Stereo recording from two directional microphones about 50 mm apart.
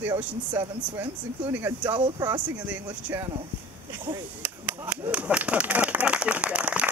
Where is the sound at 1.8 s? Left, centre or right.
Right.